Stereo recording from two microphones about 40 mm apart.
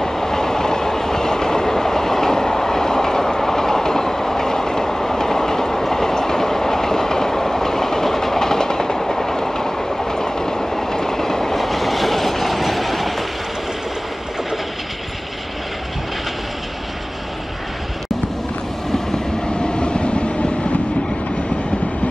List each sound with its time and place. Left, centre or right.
0.0 s train: centre
19.6 s train: left